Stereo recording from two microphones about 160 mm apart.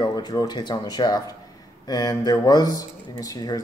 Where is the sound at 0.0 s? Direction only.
25° left (ahead or behind).